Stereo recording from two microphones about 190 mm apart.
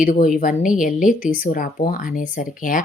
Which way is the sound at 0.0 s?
45° left (ahead or behind).